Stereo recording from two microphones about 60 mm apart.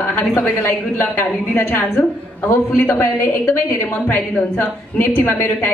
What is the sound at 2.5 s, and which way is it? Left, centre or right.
A woman's voice, left.